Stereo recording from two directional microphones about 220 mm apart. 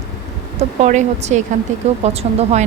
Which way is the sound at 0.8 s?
30° right (ahead or behind).